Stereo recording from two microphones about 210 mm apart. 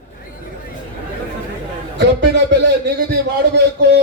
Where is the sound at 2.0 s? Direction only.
55° right (ahead or behind).